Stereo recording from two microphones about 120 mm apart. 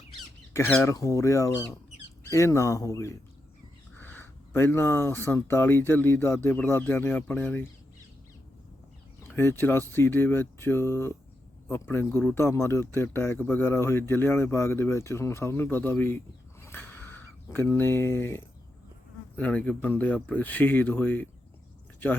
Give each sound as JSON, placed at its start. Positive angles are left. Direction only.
{"t": 0.5, "sound": "speech", "side_deg": 20}
{"t": 9.2, "sound": "speech", "side_deg": 20}